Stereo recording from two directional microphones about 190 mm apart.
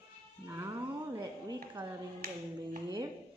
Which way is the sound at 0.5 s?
15° right (ahead or behind).